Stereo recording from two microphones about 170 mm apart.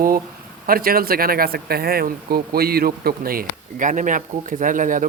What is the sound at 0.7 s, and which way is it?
Speech, 60° right (ahead or behind).